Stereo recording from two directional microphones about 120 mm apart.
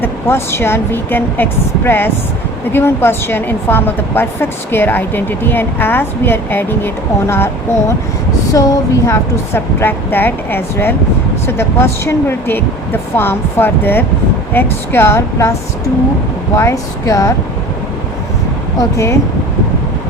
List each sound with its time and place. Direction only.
0.0 s a woman's voice: 20° left (ahead or behind)
16.6 s speech: 25° left (ahead or behind)
18.8 s speech: 25° left (ahead or behind)